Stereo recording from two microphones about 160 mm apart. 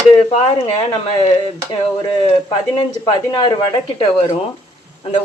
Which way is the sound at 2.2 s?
30° left (ahead or behind).